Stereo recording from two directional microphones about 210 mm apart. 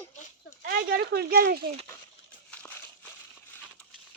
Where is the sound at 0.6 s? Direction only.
45° right (ahead or behind).